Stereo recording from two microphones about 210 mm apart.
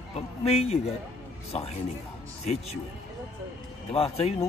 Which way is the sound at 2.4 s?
30° left (ahead or behind).